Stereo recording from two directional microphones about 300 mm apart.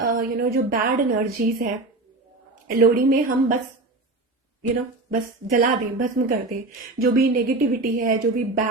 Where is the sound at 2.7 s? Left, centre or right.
Right.